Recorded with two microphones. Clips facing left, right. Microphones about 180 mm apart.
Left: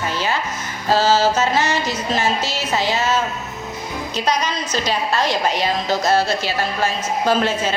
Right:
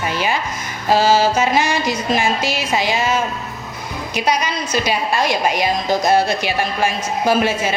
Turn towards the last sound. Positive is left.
turn(degrees=-10)  # may be behind; listen again after turning